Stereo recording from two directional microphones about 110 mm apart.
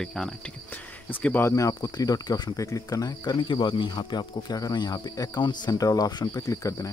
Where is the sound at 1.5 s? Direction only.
30° left (ahead or behind).